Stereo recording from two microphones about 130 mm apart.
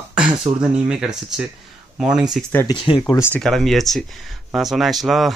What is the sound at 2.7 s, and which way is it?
Speech, 40° left (ahead or behind).